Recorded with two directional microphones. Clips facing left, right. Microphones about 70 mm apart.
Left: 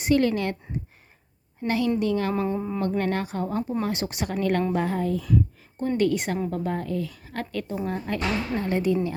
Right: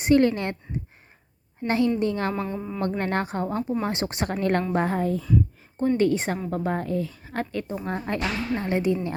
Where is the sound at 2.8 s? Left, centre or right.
Right.